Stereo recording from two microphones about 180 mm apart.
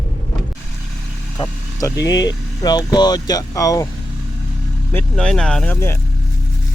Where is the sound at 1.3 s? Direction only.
20° left (ahead or behind).